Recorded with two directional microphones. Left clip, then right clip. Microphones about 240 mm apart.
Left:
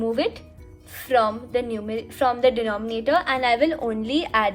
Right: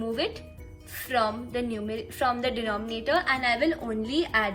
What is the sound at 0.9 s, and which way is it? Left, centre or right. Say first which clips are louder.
A woman's voice: left 6 dB; left.